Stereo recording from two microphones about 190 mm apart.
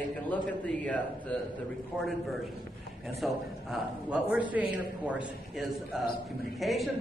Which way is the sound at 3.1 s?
Centre (ahead or behind).